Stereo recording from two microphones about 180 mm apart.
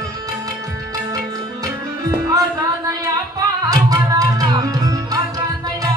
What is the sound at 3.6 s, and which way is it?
Tabla, 20° right (ahead or behind).